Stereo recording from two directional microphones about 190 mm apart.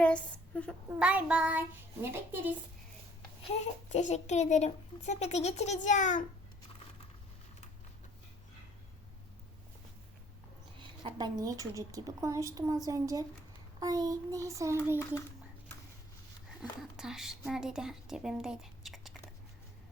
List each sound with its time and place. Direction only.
0.0 s speech: 5° left (ahead or behind)
0.9 s a woman's voice: 5° right (ahead or behind)
3.5 s a child's voice: 35° left (ahead or behind)
10.8 s a woman's voice: 25° right (ahead or behind)
16.6 s speech: 5° right (ahead or behind)